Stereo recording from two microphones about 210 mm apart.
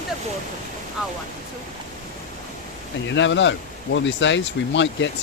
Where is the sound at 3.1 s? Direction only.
60° left (ahead or behind).